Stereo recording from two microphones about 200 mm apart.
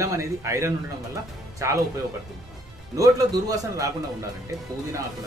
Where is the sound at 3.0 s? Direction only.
15° right (ahead or behind).